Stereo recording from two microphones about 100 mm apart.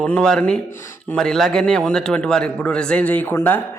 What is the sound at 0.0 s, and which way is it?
A man's voice, 5° left (ahead or behind).